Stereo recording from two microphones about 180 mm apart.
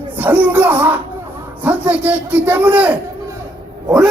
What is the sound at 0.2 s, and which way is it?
A man's voice, 10° right (ahead or behind).